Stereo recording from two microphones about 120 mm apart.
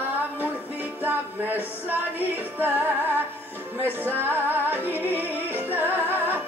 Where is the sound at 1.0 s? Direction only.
15° right (ahead or behind).